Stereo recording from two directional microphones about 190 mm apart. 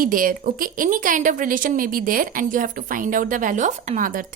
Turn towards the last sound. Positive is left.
turn(degrees=-45)  # may be behind; listen again after turning